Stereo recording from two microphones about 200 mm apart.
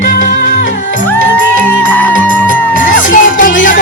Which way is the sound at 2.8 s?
40° left (ahead or behind).